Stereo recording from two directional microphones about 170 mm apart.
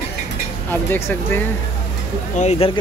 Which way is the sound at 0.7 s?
15° left (ahead or behind).